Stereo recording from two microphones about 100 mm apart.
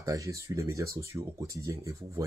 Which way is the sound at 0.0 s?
35° right (ahead or behind).